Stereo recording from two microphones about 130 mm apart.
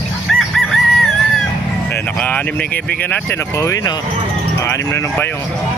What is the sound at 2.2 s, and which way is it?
Speech, 10° left (ahead or behind).